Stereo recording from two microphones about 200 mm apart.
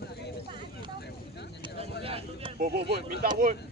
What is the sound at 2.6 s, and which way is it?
Speech, 30° right (ahead or behind).